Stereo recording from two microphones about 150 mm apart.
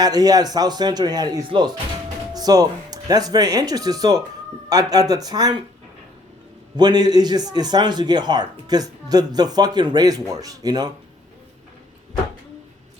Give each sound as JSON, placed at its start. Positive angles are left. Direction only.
{"t": 0.0, "sound": "a man's voice", "side_deg": -25}
{"t": 6.7, "sound": "a man's voice", "side_deg": -30}